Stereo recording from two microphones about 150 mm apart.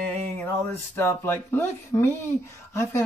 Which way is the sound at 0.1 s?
15° left (ahead or behind).